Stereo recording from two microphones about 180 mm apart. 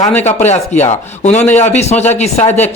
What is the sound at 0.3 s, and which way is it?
Speech, 40° left (ahead or behind).